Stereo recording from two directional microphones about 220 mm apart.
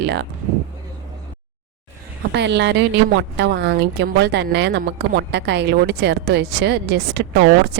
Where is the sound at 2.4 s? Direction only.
50° right (ahead or behind).